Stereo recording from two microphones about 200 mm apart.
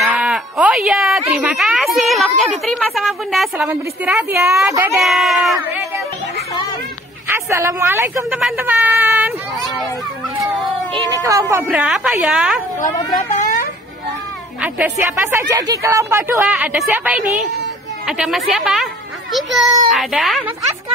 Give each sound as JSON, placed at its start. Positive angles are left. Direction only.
{"t": 0.0, "sound": "sheep", "side_deg": 0}
{"t": 1.3, "sound": "a woman's voice", "side_deg": 0}
{"t": 5.0, "sound": "speech", "side_deg": 0}
{"t": 7.2, "sound": "a woman's voice", "side_deg": -15}
{"t": 8.3, "sound": "a sound", "side_deg": -5}
{"t": 10.9, "sound": "speech", "side_deg": -20}
{"t": 11.6, "sound": "speech", "side_deg": -5}
{"t": 14.6, "sound": "a woman's voice", "side_deg": -10}